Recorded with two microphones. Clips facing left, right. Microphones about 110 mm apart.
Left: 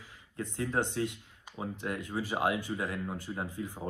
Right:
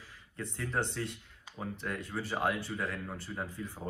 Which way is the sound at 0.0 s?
20° left (ahead or behind).